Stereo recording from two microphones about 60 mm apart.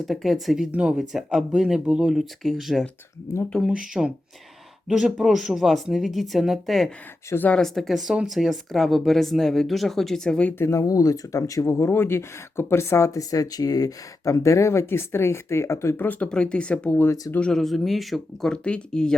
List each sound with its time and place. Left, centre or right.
0.0 s speech: centre
0.7 s speech: centre
0.9 s speech: centre
3.3 s speech: left
3.8 s speech: centre
10.7 s speech: left
11.7 s speech: left
16.0 s speech: left
16.3 s speech: centre
17.5 s speech: centre
18.4 s speech: centre